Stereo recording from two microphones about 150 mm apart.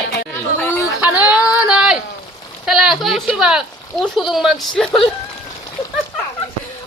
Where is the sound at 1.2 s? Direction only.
10° right (ahead or behind).